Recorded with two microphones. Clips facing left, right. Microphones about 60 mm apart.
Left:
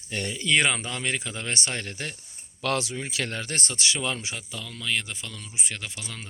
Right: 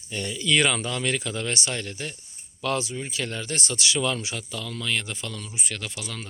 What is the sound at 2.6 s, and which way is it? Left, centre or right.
Speech, left.